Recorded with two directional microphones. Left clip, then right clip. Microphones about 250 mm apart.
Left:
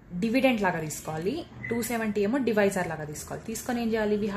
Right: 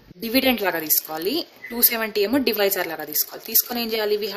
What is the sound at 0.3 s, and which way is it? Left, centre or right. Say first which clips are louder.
A woman's voice: right 4 dB; right.